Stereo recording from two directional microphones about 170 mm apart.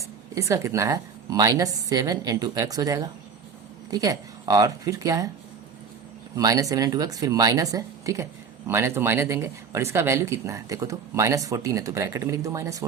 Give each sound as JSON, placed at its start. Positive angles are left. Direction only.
{"t": 0.0, "sound": "speech", "side_deg": -20}
{"t": 6.3, "sound": "speech", "side_deg": -20}